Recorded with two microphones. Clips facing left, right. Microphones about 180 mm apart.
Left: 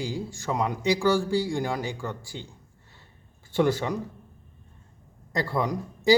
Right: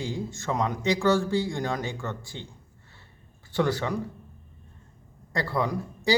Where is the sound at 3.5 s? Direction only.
15° left (ahead or behind).